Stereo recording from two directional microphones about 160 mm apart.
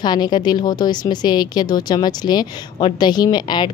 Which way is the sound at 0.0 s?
25° left (ahead or behind).